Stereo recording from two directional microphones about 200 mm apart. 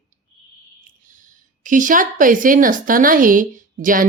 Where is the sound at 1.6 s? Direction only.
40° right (ahead or behind).